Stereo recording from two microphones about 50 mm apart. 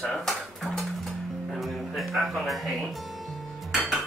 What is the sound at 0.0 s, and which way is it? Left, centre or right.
Speech, centre.